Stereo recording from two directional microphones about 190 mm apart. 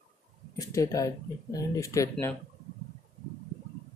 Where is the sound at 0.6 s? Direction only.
15° left (ahead or behind).